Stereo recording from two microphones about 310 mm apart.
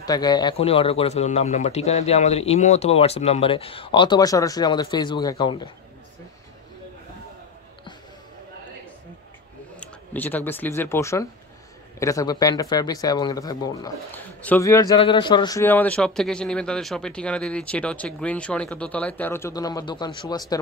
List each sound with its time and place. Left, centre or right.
0.0 s speech: centre
9.8 s speech: centre